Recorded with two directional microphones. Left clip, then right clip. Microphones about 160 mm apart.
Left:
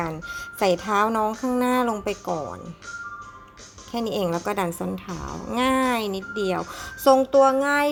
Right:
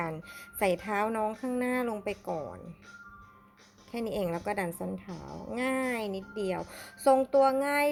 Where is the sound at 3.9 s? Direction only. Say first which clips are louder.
Left 7 dB; 10° right (ahead or behind).